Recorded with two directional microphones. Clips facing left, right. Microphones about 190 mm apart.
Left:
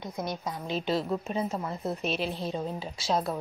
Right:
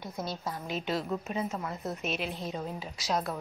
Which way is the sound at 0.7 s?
30° left (ahead or behind).